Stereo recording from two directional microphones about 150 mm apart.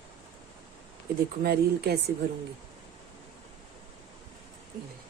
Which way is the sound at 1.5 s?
90° right.